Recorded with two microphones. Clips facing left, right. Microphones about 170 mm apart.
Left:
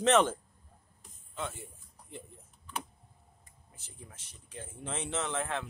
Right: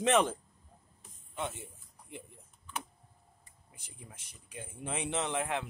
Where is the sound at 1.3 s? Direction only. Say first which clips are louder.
Right 1 dB; 20° right (ahead or behind).